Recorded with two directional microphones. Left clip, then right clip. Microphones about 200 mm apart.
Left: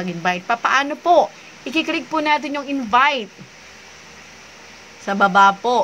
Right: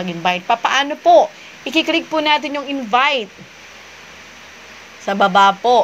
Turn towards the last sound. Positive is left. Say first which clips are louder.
# right 2 dB
turn(degrees=25)  # may be behind; listen again after turning